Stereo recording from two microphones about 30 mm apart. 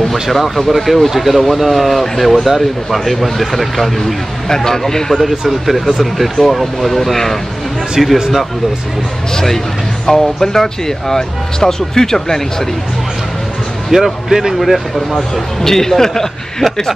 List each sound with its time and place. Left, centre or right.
0.1 s speech: centre
4.5 s speech: centre
5.5 s speech: centre
8.0 s speech: centre
9.3 s speech: centre
13.9 s speech: centre
14.6 s speech: centre
15.3 s speech: centre